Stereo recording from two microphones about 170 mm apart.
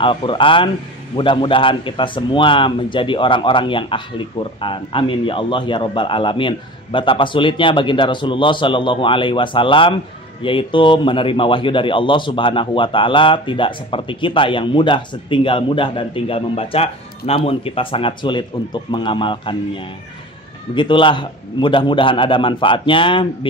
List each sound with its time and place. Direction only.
0.0 s a man's voice: 30° left (ahead or behind)
20.7 s a man's voice: 30° left (ahead or behind)